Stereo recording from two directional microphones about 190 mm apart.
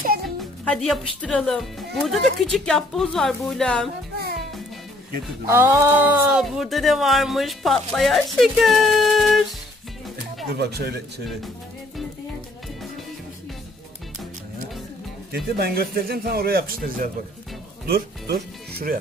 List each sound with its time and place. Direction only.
0.4 s speech: centre (ahead or behind)
5.5 s speech: 15° right (ahead or behind)
10.5 s speech: 55° right (ahead or behind)
15.3 s a man's voice: 55° right (ahead or behind)